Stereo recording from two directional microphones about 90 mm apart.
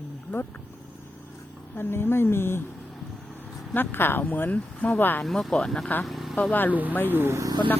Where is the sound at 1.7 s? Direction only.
25° left (ahead or behind).